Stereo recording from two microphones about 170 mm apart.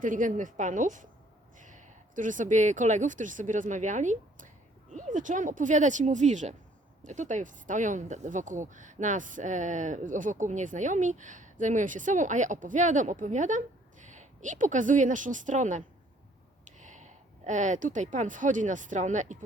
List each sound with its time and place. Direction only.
0.0 s speech: 50° right (ahead or behind)
16.8 s speech: 45° right (ahead or behind)